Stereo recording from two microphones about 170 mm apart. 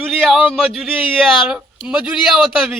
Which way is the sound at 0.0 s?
Centre (ahead or behind).